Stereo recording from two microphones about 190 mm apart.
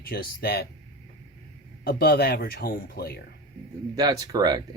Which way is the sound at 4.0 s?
20° right (ahead or behind).